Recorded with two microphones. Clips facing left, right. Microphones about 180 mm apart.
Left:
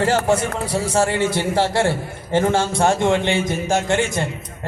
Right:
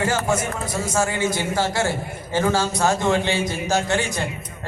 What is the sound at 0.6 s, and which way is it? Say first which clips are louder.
A man's voice: left 4 dB; 30° left (ahead or behind).